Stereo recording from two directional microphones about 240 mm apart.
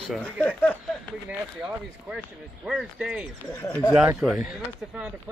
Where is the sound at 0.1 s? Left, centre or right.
Centre.